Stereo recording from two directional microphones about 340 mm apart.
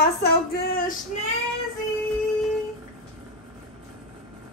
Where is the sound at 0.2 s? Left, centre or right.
Left.